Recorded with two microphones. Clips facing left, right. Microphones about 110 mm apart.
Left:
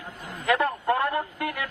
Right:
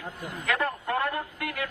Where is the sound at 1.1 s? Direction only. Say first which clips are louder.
Left 5 dB; 30° left (ahead or behind).